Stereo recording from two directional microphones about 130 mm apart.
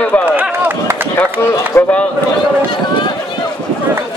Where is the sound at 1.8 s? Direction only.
15° left (ahead or behind).